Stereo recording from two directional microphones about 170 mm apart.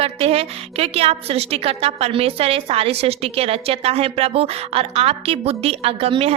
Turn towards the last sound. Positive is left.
turn(degrees=-35)  # may be behind; listen again after turning